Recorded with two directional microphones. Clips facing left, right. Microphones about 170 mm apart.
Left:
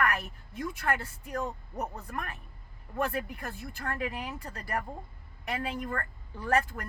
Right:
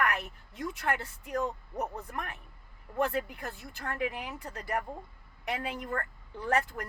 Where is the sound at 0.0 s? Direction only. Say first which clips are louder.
Left 1 dB; 20° right (ahead or behind).